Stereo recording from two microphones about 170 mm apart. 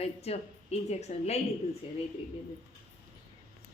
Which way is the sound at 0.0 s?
40° left (ahead or behind).